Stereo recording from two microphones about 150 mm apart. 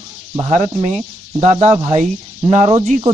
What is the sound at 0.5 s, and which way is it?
Speech, 55° right (ahead or behind).